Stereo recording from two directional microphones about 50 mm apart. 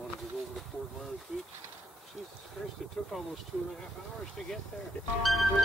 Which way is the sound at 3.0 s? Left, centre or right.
Centre.